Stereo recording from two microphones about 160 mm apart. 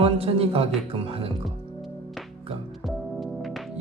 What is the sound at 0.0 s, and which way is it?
Speech, 40° right (ahead or behind).